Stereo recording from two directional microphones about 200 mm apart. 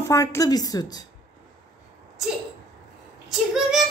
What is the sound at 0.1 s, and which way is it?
Speech, 15° left (ahead or behind).